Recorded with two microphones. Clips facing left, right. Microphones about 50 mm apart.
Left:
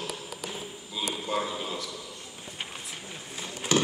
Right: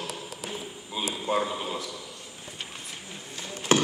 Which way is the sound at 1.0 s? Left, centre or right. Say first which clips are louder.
Right 3 dB; right.